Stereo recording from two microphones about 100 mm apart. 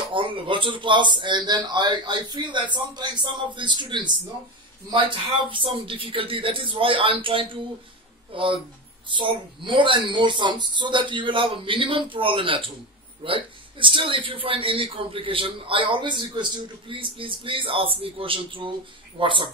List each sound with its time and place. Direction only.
0.1 s a man's voice: 60° right (ahead or behind)